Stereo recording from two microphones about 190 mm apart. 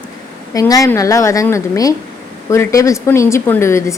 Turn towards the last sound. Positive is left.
turn(degrees=15)  # may be behind; listen again after turning